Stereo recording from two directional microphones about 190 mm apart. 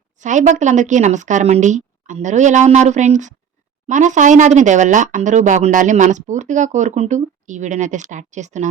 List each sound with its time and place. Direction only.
0.2 s speech: 40° right (ahead or behind)